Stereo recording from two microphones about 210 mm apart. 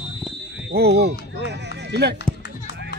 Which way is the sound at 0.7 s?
50° right (ahead or behind).